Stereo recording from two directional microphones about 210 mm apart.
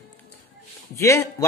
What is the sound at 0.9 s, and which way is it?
Speech, 15° left (ahead or behind).